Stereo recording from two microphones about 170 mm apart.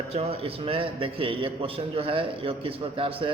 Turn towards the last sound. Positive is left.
turn(degrees=-30)  # may be behind; listen again after turning